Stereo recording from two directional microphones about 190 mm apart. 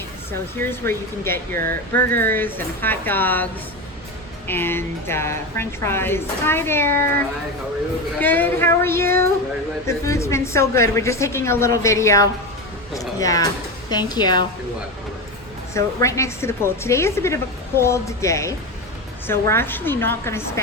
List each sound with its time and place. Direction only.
0.3 s speech: 10° left (ahead or behind)
8.2 s speech: 10° left (ahead or behind)
12.9 s music: 20° left (ahead or behind)
13.9 s a woman's voice: 20° left (ahead or behind)
15.7 s speech: 15° left (ahead or behind)